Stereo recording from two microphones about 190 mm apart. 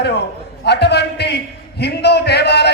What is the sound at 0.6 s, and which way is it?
A man's voice, 60° left (ahead or behind).